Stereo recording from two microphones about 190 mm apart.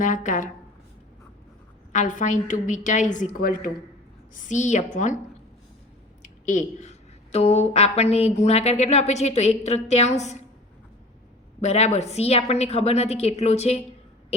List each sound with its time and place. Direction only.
0.0 s a woman's voice: 40° left (ahead or behind)
1.9 s a woman's voice: 40° left (ahead or behind)
4.4 s a woman's voice: 40° left (ahead or behind)
6.2 s a woman's voice: 40° left (ahead or behind)
11.6 s a woman's voice: 35° left (ahead or behind)